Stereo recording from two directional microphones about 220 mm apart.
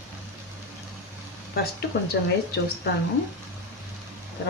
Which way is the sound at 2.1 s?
50° left (ahead or behind).